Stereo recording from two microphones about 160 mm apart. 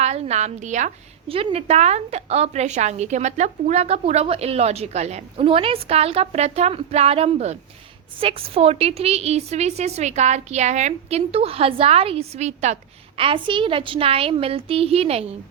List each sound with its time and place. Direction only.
0.0 s a woman's voice: 45° right (ahead or behind)
1.3 s a woman's voice: 35° right (ahead or behind)